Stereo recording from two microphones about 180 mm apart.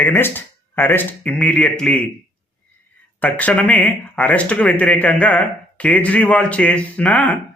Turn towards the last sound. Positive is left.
turn(degrees=10)  # may be behind; listen again after turning